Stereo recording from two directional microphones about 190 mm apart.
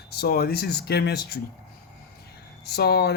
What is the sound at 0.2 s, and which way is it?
Speech, 55° left (ahead or behind).